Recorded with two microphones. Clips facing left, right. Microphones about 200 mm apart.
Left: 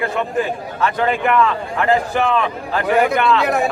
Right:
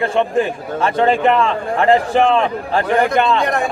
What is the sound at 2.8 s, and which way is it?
Speech, 10° left (ahead or behind).